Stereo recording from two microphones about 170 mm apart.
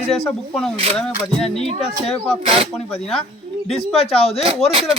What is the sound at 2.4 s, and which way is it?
Speech, 35° right (ahead or behind).